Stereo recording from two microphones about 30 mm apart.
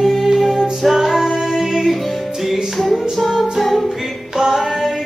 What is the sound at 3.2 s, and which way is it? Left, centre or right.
Music, centre.